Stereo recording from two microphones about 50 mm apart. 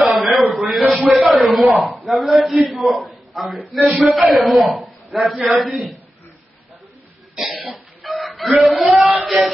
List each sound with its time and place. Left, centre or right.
0.0 s a sound: centre
2.0 s a man's voice: centre
7.7 s chicken: centre